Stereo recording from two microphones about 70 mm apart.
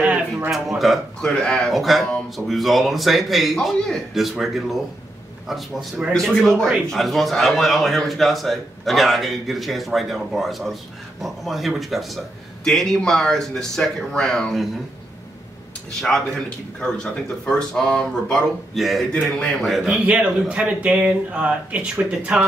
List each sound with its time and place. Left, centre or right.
0.0 s a sound: right
0.5 s a man's voice: centre
1.2 s speech: centre
1.7 s a man's voice: centre
15.9 s speech: centre
18.8 s a man's voice: centre
19.1 s speech: centre
20.1 s speech: centre